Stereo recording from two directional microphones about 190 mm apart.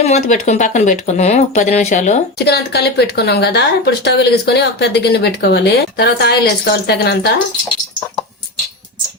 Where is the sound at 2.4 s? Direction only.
60° left (ahead or behind).